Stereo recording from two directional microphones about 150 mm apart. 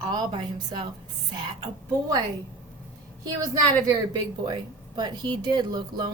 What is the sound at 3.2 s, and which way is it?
Speech, 20° right (ahead or behind).